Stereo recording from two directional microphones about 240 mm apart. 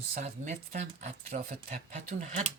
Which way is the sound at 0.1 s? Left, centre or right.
Right.